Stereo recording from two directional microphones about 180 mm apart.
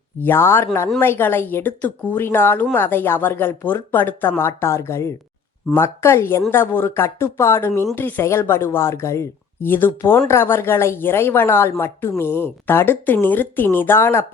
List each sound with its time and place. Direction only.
0.2 s speech: 10° left (ahead or behind)